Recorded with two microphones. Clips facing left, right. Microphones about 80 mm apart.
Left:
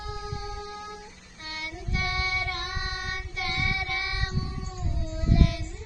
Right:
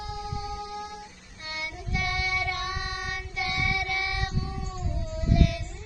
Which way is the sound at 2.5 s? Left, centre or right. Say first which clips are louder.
Right 2 dB; left.